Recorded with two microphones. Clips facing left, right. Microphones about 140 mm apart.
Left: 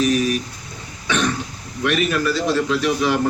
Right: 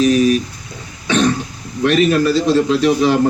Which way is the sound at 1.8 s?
30° right (ahead or behind).